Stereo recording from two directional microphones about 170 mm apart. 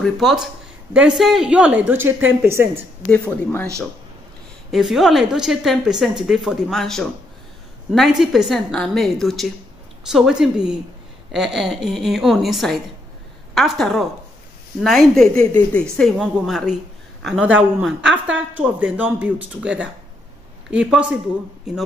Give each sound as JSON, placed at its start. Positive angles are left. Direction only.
{"t": 0.0, "sound": "a woman's voice", "side_deg": 0}
{"t": 3.1, "sound": "speech", "side_deg": 10}
{"t": 4.6, "sound": "a woman's voice", "side_deg": 0}